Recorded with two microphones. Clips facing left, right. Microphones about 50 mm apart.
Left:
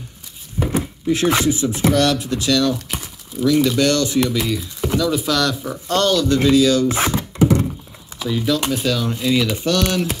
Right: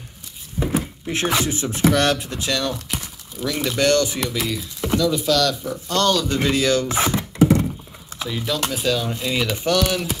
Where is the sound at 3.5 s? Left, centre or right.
Centre.